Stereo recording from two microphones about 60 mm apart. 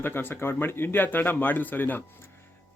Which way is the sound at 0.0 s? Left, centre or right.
Left.